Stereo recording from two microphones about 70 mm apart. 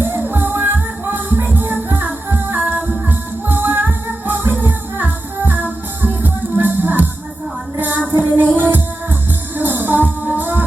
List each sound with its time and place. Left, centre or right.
0.1 s music: right